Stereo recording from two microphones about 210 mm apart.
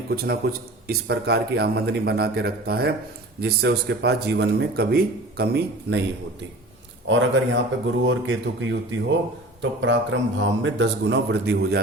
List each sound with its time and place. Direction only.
0.1 s a man's voice: 50° right (ahead or behind)
7.1 s a man's voice: 65° right (ahead or behind)